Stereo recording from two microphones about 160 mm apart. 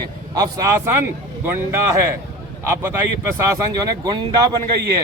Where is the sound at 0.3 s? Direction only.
20° right (ahead or behind).